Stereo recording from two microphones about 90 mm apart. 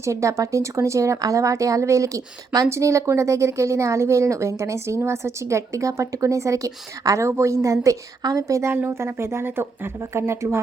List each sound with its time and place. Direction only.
0.0 s speech: 35° right (ahead or behind)
8.7 s speech: 25° right (ahead or behind)